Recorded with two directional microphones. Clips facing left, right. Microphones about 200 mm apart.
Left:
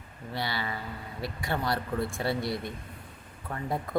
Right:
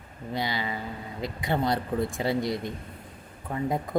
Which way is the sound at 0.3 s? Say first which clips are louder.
Right 3 dB; 20° right (ahead or behind).